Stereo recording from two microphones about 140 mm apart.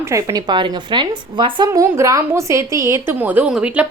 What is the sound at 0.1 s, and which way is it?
A woman's voice, 25° right (ahead or behind).